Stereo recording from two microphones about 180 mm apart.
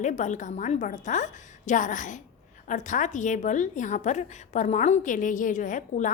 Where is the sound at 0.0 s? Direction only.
45° left (ahead or behind).